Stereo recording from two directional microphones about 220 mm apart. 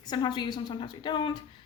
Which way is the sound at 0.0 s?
20° left (ahead or behind).